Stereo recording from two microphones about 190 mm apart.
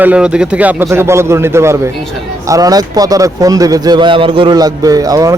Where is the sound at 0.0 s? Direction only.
5° right (ahead or behind).